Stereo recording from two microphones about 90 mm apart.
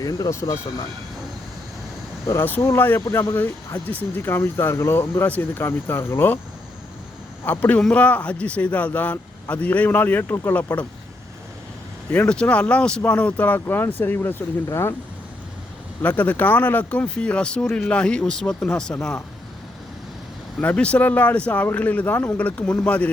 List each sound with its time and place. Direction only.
0.0 s speech: 40° left (ahead or behind)
2.2 s speech: 25° left (ahead or behind)
7.4 s speech: 15° left (ahead or behind)
10.7 s speech: 15° left (ahead or behind)
12.1 s speech: 10° left (ahead or behind); by 14.9 s 30° left (ahead or behind)
16.0 s speech: 20° left (ahead or behind)
20.6 s speech: 15° left (ahead or behind)